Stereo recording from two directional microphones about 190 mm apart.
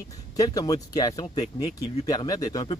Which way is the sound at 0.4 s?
20° left (ahead or behind).